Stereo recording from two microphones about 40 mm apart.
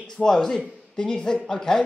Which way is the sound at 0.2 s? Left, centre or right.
Centre.